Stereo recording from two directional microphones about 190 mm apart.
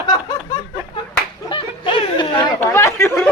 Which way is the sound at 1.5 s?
25° left (ahead or behind).